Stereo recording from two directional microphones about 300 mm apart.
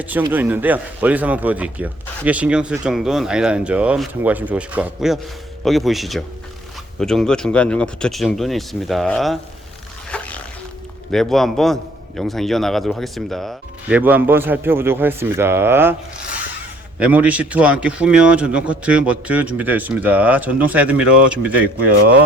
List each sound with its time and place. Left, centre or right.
0.0 s speech: centre
10.1 s a sound: centre
11.1 s speech: centre
17.0 s speech: centre
21.8 s speech: right